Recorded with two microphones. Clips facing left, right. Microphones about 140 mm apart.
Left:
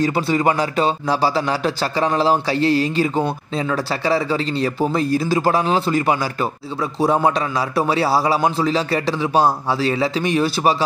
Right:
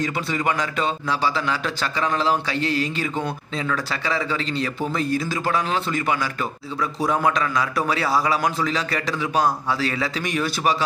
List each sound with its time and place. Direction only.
0.0 s a man's voice: 35° left (ahead or behind)